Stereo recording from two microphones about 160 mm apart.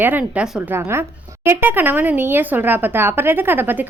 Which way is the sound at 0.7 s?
15° right (ahead or behind).